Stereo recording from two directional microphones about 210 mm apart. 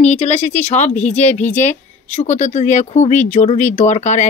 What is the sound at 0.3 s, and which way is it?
Speech, 35° left (ahead or behind).